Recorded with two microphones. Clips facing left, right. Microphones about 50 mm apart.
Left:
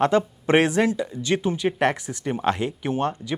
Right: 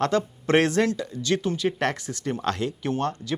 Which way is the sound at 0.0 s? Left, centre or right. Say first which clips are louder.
Left 4 dB; centre.